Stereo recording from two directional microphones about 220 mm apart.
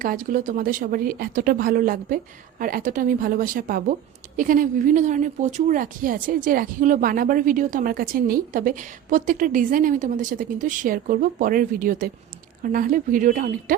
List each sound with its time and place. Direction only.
0.0 s speech: 40° right (ahead or behind)